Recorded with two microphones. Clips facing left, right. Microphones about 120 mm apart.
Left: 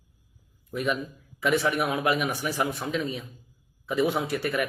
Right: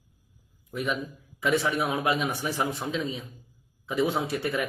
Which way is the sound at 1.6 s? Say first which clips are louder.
Left 1 dB; 25° right (ahead or behind).